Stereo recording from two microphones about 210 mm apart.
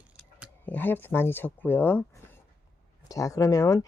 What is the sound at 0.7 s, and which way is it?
Speech, 10° left (ahead or behind).